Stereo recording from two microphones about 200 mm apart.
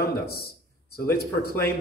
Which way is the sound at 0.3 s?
50° left (ahead or behind).